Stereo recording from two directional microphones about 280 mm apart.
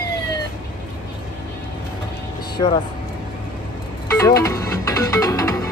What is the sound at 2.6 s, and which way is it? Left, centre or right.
Speech, centre.